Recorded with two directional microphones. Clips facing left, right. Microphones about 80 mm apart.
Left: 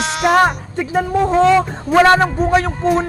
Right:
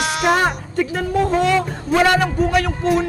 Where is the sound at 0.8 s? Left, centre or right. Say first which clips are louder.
Left 2 dB; centre.